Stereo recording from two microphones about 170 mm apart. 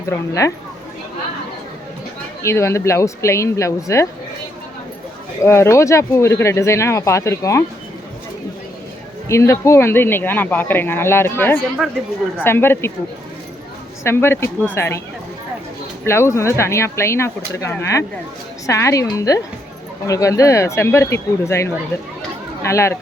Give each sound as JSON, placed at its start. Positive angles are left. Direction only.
{"t": 0.1, "sound": "speech", "side_deg": 20}
{"t": 2.4, "sound": "speech", "side_deg": 15}
{"t": 5.4, "sound": "speech", "side_deg": 15}
{"t": 9.3, "sound": "speech", "side_deg": 15}
{"t": 14.0, "sound": "speech", "side_deg": 15}
{"t": 16.0, "sound": "a woman's voice", "side_deg": 15}